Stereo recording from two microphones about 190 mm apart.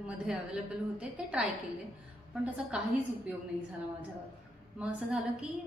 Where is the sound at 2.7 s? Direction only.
5° right (ahead or behind).